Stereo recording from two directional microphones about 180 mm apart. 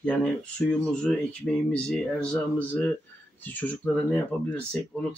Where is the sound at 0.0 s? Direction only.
5° left (ahead or behind).